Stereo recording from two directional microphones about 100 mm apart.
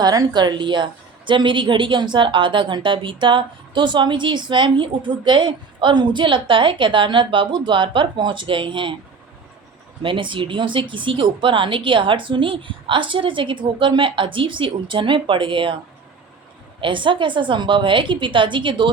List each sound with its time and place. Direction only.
0.0 s a woman's voice: 40° right (ahead or behind)
10.0 s speech: 55° right (ahead or behind)
16.8 s speech: 55° right (ahead or behind)